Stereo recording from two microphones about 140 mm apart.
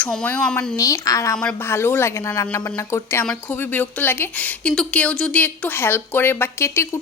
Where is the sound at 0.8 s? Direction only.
25° left (ahead or behind).